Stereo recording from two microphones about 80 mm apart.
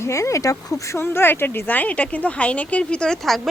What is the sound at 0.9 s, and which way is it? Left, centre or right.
Speech, left.